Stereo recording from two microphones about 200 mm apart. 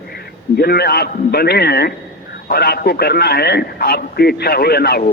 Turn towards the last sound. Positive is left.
turn(degrees=55)  # may be behind; listen again after turning